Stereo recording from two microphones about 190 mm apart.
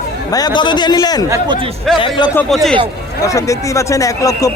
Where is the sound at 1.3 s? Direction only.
25° right (ahead or behind).